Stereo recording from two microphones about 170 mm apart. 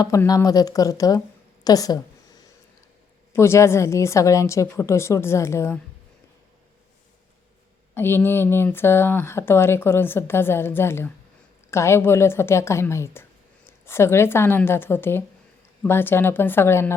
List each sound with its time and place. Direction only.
0.0 s speech: 20° left (ahead or behind)
1.6 s a sound: 20° left (ahead or behind)
3.3 s speech: 15° left (ahead or behind)
7.9 s speech: 15° left (ahead or behind)